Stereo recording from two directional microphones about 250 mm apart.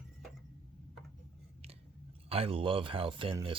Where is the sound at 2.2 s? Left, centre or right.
Right.